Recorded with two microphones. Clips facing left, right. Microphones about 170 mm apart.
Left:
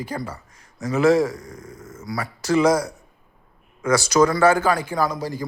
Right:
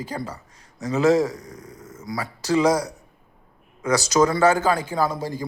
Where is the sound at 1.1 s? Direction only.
40° right (ahead or behind).